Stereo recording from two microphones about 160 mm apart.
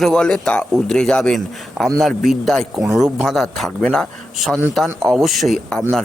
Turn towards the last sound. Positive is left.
turn(degrees=0)  # may be behind; listen again after turning